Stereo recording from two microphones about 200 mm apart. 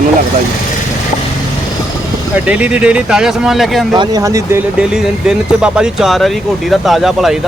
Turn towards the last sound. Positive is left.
turn(degrees=0)  # may be behind; listen again after turning